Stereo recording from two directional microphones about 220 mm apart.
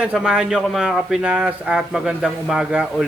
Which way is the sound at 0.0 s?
5° right (ahead or behind).